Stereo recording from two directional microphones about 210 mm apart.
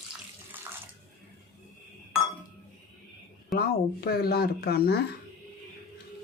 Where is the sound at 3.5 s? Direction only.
45° left (ahead or behind).